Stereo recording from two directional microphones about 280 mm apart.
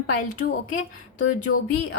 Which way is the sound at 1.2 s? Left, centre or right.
Left.